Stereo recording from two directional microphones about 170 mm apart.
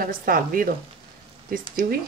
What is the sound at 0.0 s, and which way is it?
Speech, 55° right (ahead or behind).